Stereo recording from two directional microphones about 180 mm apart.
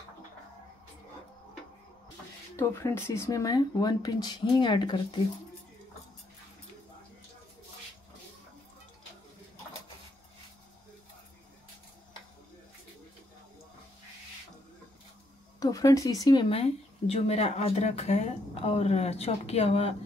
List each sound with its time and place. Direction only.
2.5 s speech: 15° left (ahead or behind)
15.6 s speech: 20° left (ahead or behind)